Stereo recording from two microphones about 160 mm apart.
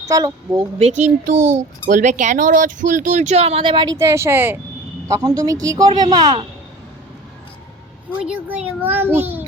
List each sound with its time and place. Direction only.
0.0 s speech: 20° right (ahead or behind)
0.8 s speech: 45° right (ahead or behind)
3.9 s a child's voice: 15° right (ahead or behind)
8.2 s a child's voice: 10° right (ahead or behind)